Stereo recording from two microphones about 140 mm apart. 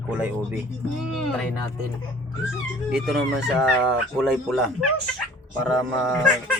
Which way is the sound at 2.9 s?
5° right (ahead or behind).